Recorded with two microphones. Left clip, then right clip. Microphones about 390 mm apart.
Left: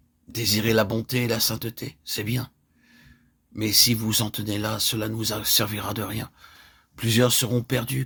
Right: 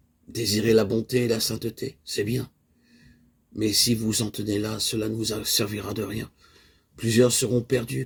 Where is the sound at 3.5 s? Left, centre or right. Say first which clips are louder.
Left 2 dB; left.